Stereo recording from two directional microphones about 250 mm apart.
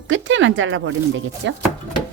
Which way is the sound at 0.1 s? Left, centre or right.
Right.